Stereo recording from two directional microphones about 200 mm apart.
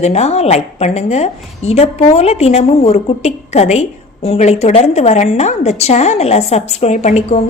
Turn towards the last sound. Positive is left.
turn(degrees=35)  # may be behind; listen again after turning